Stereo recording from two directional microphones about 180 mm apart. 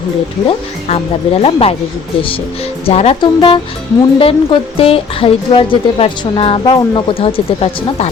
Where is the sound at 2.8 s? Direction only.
35° left (ahead or behind).